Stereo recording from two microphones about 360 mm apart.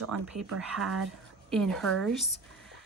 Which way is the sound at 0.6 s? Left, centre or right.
Centre.